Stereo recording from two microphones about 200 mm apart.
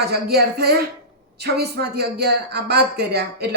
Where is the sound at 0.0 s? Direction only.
50° right (ahead or behind).